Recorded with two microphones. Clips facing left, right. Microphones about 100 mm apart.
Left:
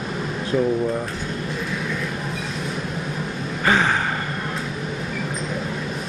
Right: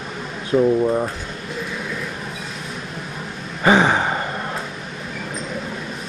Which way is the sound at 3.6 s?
20° right (ahead or behind).